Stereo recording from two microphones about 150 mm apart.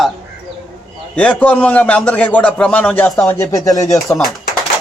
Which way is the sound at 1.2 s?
10° left (ahead or behind).